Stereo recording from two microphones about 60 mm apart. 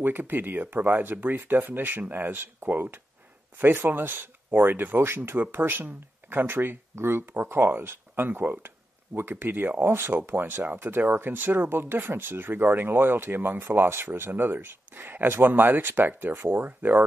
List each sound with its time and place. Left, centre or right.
0.0 s speech: right